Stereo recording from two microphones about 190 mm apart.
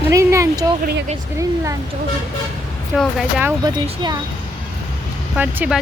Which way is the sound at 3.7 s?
20° right (ahead or behind).